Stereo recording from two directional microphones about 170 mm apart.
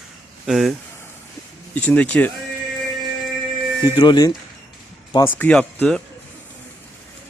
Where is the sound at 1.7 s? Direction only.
10° left (ahead or behind).